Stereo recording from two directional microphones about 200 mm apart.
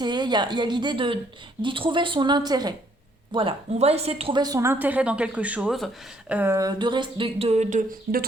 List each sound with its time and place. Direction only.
0.0 s a woman's voice: 20° right (ahead or behind); by 8.2 s 40° right (ahead or behind)